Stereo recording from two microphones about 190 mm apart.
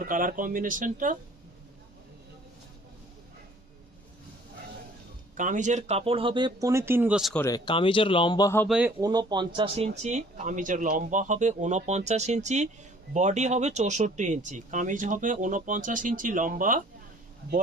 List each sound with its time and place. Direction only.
0.0 s speech: 45° right (ahead or behind)
5.3 s speech: 40° right (ahead or behind); by 7.4 s centre (ahead or behind)
7.4 s speech: 20° left (ahead or behind)
8.6 s speech: 5° right (ahead or behind)
9.0 s speech: 20° right (ahead or behind); by 16.8 s 45° right (ahead or behind)